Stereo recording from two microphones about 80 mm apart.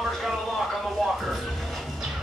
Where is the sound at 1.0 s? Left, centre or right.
Centre.